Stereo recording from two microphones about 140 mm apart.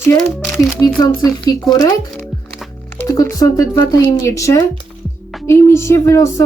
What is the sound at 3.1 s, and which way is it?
Speech, 25° left (ahead or behind).